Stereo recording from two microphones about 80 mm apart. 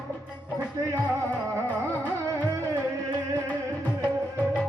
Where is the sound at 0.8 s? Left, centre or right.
Right.